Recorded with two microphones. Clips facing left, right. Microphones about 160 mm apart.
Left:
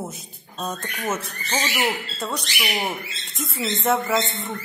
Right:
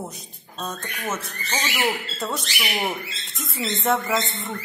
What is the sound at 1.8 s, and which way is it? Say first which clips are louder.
Speech: right 1 dB; centre (ahead or behind).